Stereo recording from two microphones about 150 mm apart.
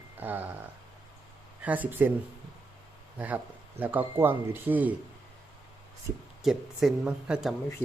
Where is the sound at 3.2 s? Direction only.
10° right (ahead or behind).